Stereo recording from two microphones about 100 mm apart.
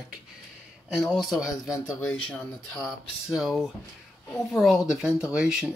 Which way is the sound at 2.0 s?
15° left (ahead or behind).